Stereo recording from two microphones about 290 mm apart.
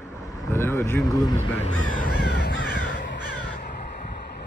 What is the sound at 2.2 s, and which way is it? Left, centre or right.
Crow, left.